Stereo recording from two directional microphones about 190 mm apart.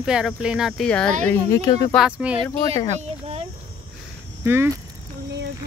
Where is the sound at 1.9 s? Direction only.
5° right (ahead or behind).